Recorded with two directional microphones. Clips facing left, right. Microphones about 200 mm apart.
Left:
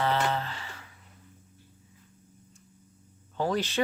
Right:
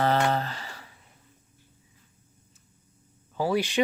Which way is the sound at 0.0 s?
40° right (ahead or behind).